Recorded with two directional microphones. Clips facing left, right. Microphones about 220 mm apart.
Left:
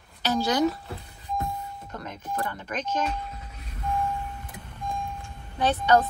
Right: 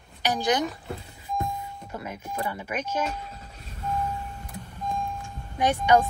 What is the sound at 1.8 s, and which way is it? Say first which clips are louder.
Speech: right 1 dB; 10° right (ahead or behind).